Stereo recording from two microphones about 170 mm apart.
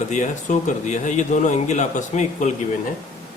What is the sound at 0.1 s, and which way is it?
A man's voice, 45° left (ahead or behind).